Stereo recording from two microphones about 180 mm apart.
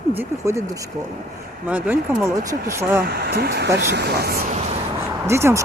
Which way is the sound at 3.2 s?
60° right (ahead or behind).